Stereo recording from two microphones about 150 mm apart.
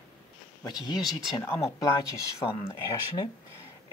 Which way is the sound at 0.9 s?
Centre (ahead or behind).